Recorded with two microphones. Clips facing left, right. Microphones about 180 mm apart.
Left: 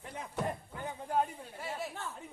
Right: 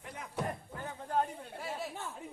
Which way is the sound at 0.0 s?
30° left (ahead or behind).